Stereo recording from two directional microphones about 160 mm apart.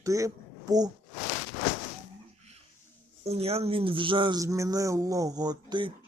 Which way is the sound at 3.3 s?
40° right (ahead or behind).